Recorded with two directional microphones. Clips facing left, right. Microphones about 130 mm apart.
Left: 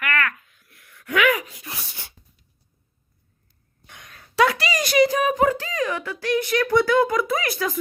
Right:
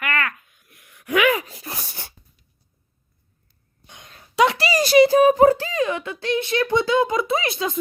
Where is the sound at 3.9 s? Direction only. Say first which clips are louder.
Right 1 dB; 25° right (ahead or behind).